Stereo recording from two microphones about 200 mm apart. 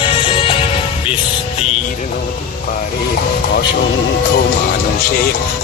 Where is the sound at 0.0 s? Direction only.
25° left (ahead or behind).